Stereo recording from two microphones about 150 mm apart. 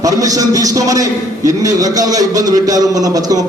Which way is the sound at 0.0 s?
25° right (ahead or behind).